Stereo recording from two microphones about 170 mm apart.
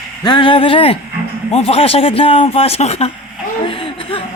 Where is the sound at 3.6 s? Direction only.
30° left (ahead or behind).